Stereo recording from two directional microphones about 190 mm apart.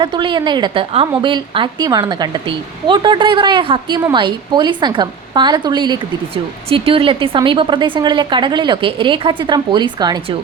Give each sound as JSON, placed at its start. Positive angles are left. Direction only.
{"t": 0.0, "sound": "a woman's voice", "side_deg": -25}